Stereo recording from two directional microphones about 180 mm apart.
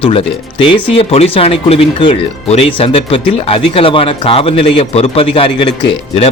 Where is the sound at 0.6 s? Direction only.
30° left (ahead or behind).